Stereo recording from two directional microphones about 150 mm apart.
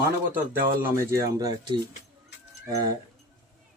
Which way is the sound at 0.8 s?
20° right (ahead or behind).